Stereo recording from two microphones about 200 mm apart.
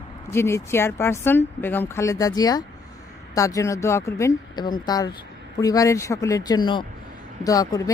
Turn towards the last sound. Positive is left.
turn(degrees=15)  # may be behind; listen again after turning